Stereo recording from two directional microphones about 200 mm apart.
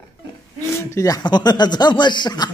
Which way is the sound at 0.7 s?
15° left (ahead or behind).